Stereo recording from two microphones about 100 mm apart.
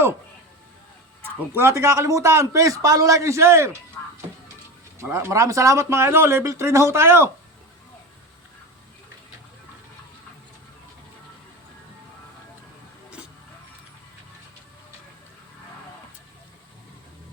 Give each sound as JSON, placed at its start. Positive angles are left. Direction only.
{"t": 1.5, "sound": "a man's voice", "side_deg": -30}
{"t": 4.9, "sound": "speech", "side_deg": -25}